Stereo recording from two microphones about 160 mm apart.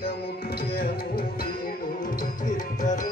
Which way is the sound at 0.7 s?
70° left (ahead or behind).